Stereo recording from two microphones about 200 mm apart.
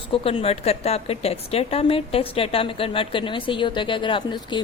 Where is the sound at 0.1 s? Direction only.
30° left (ahead or behind).